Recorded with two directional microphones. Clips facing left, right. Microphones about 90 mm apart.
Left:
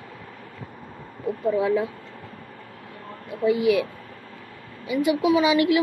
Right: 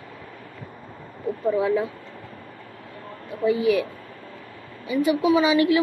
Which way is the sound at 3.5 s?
35° right (ahead or behind).